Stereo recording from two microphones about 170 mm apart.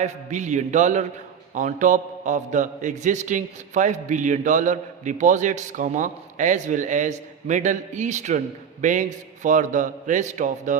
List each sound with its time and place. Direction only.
0.0 s a man's voice: 45° right (ahead or behind)